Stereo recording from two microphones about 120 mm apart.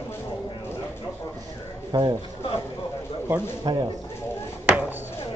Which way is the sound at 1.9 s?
35° right (ahead or behind).